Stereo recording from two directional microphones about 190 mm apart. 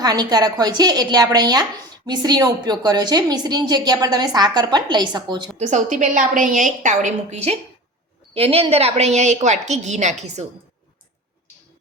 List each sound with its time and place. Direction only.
0.0 s a woman's voice: 20° right (ahead or behind)
5.5 s a woman's voice: 40° right (ahead or behind)